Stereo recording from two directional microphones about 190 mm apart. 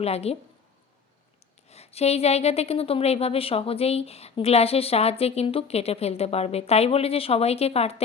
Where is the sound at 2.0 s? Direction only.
35° left (ahead or behind).